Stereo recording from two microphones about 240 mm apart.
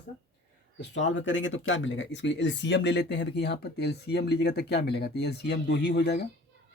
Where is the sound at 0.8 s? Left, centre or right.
Left.